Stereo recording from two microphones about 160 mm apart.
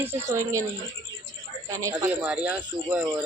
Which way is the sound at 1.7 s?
20° right (ahead or behind).